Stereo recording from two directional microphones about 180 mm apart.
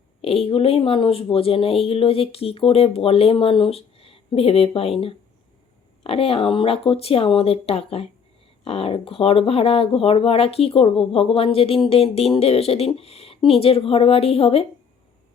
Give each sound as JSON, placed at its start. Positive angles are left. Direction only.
{"t": 0.2, "sound": "speech", "side_deg": 35}